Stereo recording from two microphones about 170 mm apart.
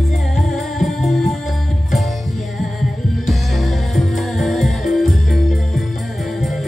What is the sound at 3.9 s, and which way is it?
Music, centre (ahead or behind).